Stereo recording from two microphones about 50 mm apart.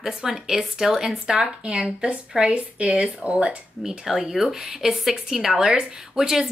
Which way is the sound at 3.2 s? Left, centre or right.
Centre.